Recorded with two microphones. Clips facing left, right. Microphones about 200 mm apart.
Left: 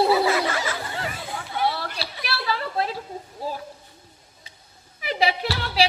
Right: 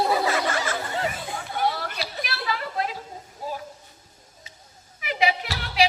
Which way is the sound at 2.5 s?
35° left (ahead or behind).